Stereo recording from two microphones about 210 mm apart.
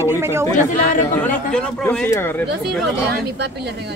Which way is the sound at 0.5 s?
35° left (ahead or behind).